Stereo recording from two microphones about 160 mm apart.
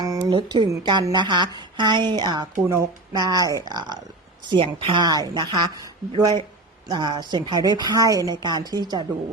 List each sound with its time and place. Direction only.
0.0 s a woman's voice: 25° right (ahead or behind)